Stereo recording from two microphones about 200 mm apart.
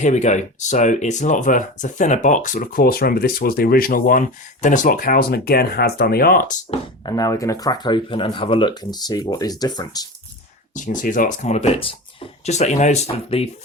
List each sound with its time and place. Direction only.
0.0 s speech: 35° left (ahead or behind)
6.7 s speech: 20° left (ahead or behind)
10.8 s speech: 40° left (ahead or behind)